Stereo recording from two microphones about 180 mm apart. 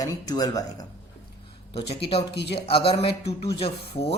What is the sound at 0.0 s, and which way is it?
Speech, 20° left (ahead or behind).